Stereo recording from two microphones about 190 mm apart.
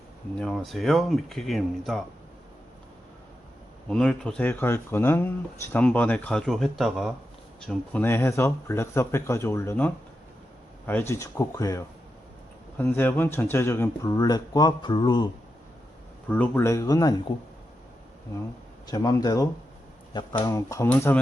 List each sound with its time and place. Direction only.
0.3 s speech: centre (ahead or behind)
3.8 s speech: 5° left (ahead or behind); by 15.3 s 25° left (ahead or behind)
16.3 s speech: 10° left (ahead or behind)
18.9 s speech: 20° left (ahead or behind)